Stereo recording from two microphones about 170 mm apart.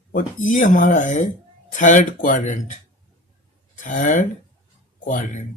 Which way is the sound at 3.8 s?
50° left (ahead or behind).